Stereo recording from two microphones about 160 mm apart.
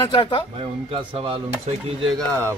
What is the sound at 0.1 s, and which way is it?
Speech, 35° left (ahead or behind).